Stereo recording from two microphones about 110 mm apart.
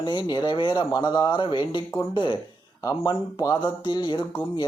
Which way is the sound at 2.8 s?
35° left (ahead or behind).